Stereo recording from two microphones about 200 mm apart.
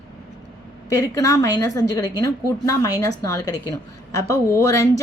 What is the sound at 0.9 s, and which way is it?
Speech, 15° left (ahead or behind).